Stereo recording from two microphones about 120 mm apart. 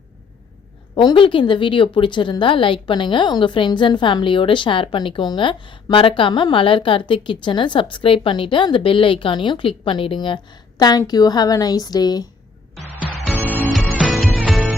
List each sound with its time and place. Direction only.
0.9 s a woman's voice: 45° left (ahead or behind)
13.7 s music: centre (ahead or behind)